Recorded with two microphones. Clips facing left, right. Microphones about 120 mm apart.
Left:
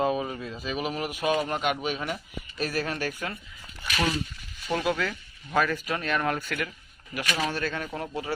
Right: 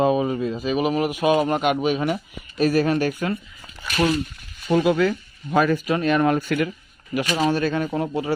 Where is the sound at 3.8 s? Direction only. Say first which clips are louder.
Right 7 dB; 35° right (ahead or behind).